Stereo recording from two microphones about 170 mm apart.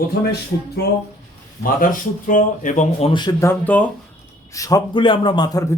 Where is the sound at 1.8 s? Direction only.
50° left (ahead or behind).